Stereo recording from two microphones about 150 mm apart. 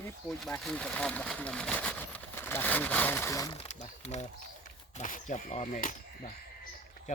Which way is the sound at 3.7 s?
50° left (ahead or behind).